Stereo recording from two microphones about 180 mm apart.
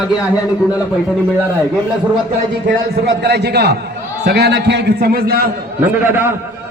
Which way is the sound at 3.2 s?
65° right (ahead or behind).